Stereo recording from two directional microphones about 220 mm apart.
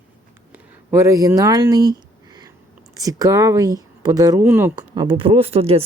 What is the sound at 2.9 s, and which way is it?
Speech, 15° right (ahead or behind).